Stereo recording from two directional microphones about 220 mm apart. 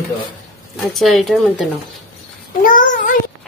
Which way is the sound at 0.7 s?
Centre (ahead or behind).